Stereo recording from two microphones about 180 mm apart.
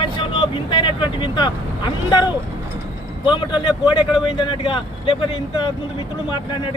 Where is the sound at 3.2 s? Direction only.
25° left (ahead or behind).